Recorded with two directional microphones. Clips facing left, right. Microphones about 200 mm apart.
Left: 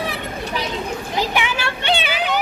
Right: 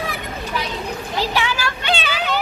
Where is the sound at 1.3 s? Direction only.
20° left (ahead or behind).